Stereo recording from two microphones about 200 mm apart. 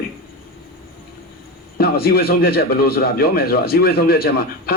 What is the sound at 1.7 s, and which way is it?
A man's voice, 50° left (ahead or behind).